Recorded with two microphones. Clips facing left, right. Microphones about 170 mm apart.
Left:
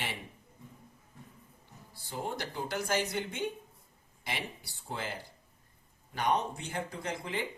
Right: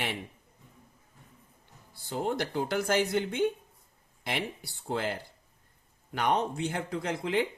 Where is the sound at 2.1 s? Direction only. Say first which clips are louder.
Right 7 dB; 65° right (ahead or behind).